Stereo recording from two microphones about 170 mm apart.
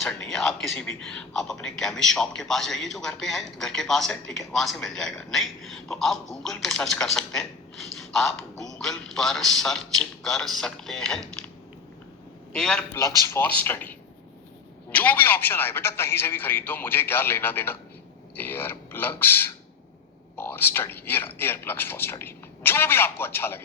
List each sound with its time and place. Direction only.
0.0 s a man's voice: 5° left (ahead or behind)
12.5 s a man's voice: 5° left (ahead or behind)
12.9 s a man's voice: 20° left (ahead or behind)